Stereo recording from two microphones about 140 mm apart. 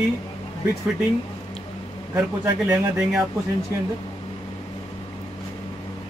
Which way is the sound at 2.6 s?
5° right (ahead or behind).